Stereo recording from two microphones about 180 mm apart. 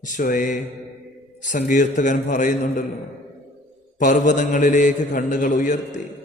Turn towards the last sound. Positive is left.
turn(degrees=45)  # may be behind; listen again after turning